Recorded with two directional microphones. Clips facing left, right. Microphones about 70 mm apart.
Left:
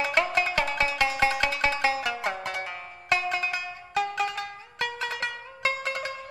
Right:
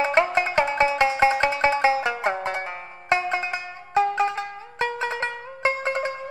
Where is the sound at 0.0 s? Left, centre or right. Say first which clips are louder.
Right 5 dB; right.